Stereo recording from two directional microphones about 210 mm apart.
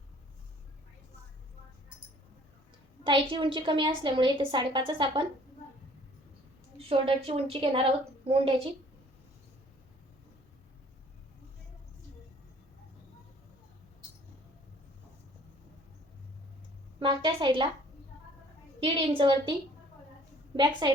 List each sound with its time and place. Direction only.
3.0 s a woman's voice: 20° right (ahead or behind)
6.8 s a woman's voice: 25° right (ahead or behind)
17.0 s a woman's voice: 20° right (ahead or behind)
18.8 s a woman's voice: 25° right (ahead or behind)
20.8 s a woman's voice: 20° right (ahead or behind)